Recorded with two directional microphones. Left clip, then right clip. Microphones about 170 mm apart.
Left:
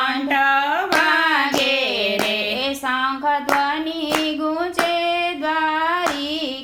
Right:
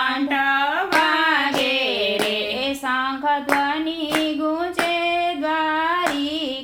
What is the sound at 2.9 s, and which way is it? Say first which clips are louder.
Hands: left 1 dB; centre (ahead or behind).